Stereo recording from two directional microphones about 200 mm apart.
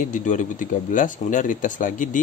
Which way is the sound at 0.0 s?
40° left (ahead or behind).